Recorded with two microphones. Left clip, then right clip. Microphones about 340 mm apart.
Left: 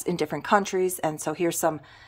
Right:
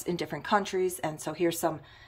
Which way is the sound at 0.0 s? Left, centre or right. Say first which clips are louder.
Left 5 dB; centre.